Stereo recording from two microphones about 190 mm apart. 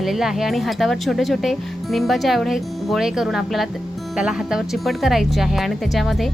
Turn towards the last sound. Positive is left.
turn(degrees=0)  # may be behind; listen again after turning